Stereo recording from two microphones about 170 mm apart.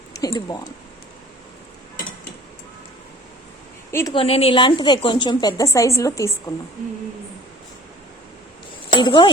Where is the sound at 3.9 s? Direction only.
15° left (ahead or behind).